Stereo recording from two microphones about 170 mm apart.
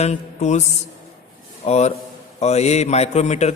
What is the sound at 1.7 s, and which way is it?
A man's voice, 40° left (ahead or behind).